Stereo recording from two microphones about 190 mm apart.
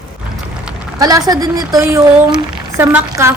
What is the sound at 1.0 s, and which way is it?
A woman's voice, 20° right (ahead or behind).